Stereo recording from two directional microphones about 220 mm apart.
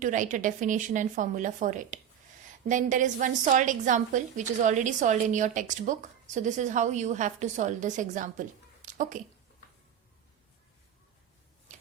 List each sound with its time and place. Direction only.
0.0 s a woman's voice: 35° right (ahead or behind)